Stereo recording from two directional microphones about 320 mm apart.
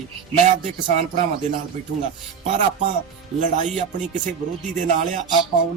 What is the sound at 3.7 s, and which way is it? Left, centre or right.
Speech, right.